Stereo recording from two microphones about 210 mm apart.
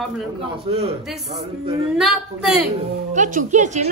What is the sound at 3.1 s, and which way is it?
Speech, 35° right (ahead or behind).